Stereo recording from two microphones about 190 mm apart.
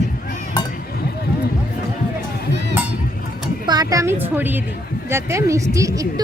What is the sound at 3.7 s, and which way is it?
A woman's voice, 20° right (ahead or behind).